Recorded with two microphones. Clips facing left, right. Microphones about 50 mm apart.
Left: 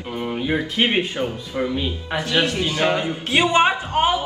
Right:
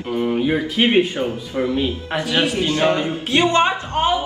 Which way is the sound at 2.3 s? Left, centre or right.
Centre.